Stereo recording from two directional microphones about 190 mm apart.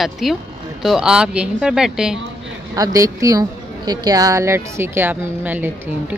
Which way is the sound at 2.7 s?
20° right (ahead or behind).